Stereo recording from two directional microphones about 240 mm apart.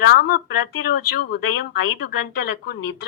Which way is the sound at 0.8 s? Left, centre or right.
Left.